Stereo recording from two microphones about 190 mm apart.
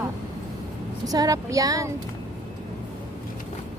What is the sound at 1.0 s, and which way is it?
Speech, 20° right (ahead or behind).